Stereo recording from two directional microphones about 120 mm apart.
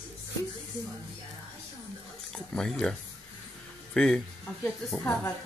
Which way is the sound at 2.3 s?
5° left (ahead or behind).